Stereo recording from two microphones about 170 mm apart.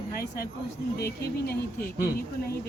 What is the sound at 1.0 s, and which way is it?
Speech, 65° left (ahead or behind).